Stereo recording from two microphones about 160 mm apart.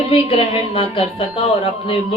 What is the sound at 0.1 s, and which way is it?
A woman's voice, 35° left (ahead or behind).